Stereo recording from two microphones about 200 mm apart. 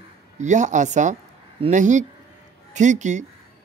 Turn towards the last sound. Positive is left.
turn(degrees=-35)  # may be behind; listen again after turning